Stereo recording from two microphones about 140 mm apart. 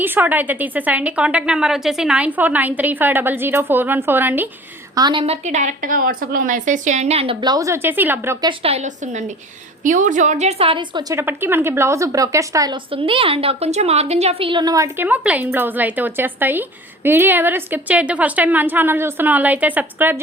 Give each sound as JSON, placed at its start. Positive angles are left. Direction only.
{"t": 0.0, "sound": "speech", "side_deg": -15}
{"t": 4.9, "sound": "a woman's voice", "side_deg": -30}
{"t": 5.2, "sound": "a woman's voice", "side_deg": -50}
{"t": 7.4, "sound": "speech", "side_deg": -25}
{"t": 8.6, "sound": "a woman's voice", "side_deg": -55}
{"t": 11.1, "sound": "speech", "side_deg": -15}
{"t": 12.9, "sound": "a woman's voice", "side_deg": -40}
{"t": 14.9, "sound": "speech", "side_deg": -10}